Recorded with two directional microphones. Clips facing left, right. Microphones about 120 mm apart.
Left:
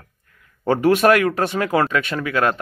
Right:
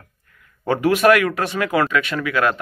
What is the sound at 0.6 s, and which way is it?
Speech, 35° left (ahead or behind).